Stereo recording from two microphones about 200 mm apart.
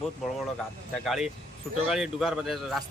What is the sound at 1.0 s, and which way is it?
Speech, centre (ahead or behind).